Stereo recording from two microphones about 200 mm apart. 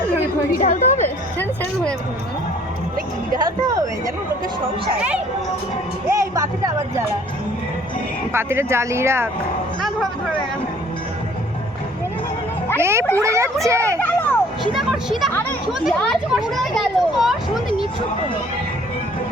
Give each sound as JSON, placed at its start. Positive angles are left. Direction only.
{"t": 0.6, "sound": "a woman's voice", "side_deg": 35}
{"t": 1.0, "sound": "music", "side_deg": 10}
{"t": 3.3, "sound": "speech", "side_deg": -20}
{"t": 6.1, "sound": "speech", "side_deg": -15}
{"t": 8.3, "sound": "speech", "side_deg": -10}
{"t": 12.8, "sound": "speech", "side_deg": -15}
{"t": 14.0, "sound": "a sound", "side_deg": 10}
{"t": 14.8, "sound": "speech", "side_deg": 0}